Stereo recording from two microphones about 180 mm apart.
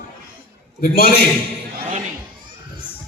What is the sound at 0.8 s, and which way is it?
Speech, 55° left (ahead or behind).